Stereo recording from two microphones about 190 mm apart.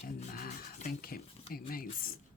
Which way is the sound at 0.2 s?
40° left (ahead or behind).